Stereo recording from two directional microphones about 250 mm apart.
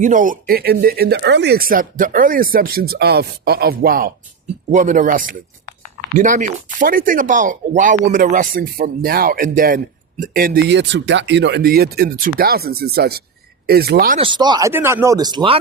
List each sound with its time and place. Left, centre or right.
0.0 s speech: right
14.2 s speech: centre